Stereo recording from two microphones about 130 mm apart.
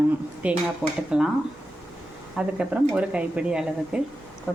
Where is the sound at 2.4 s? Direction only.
10° right (ahead or behind).